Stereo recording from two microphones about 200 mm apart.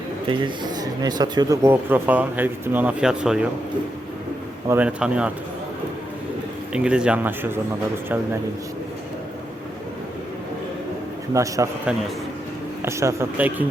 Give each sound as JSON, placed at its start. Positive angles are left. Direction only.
{"t": 0.3, "sound": "speech", "side_deg": -25}
{"t": 4.7, "sound": "speech", "side_deg": -5}
{"t": 6.7, "sound": "speech", "side_deg": -5}
{"t": 11.3, "sound": "speech", "side_deg": -15}
{"t": 12.8, "sound": "speech", "side_deg": -15}